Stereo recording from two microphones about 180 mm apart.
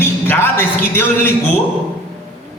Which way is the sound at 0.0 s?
10° left (ahead or behind).